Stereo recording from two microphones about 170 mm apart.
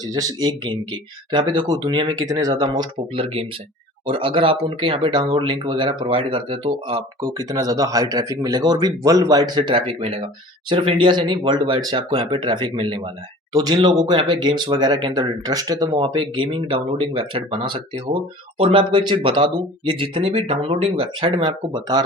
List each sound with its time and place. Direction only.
0.1 s speech: 20° right (ahead or behind)